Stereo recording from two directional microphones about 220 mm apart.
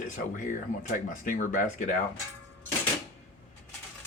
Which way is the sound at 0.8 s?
35° left (ahead or behind).